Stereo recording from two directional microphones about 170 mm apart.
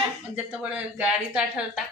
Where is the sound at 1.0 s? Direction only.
5° right (ahead or behind).